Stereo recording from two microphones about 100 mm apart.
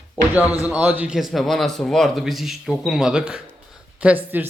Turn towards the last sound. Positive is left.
turn(degrees=-20)  # may be behind; listen again after turning